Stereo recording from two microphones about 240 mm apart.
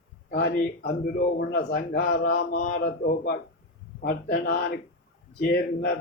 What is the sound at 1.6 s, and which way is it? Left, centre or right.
Speech, left.